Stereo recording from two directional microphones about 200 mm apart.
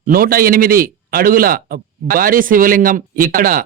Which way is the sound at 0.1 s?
45° right (ahead or behind).